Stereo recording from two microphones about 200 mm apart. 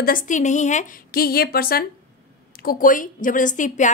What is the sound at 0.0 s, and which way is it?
A woman's voice, 45° left (ahead or behind).